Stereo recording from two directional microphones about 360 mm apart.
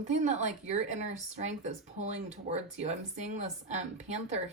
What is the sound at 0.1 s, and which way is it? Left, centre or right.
Speech, centre.